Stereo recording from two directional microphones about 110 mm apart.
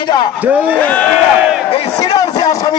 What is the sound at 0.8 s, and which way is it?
Speech, 15° left (ahead or behind).